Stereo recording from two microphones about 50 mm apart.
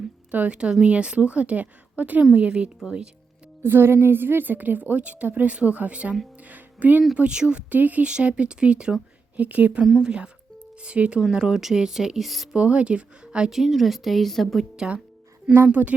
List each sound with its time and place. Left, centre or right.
0.3 s speech: right
3.6 s a woman's voice: right
6.5 s music: right
7.2 s speech: right
8.0 s speech: right
10.0 s speech: centre
11.2 s speech: centre
12.5 s speech: right
13.5 s speech: centre
14.8 s speech: centre
15.7 s speech: right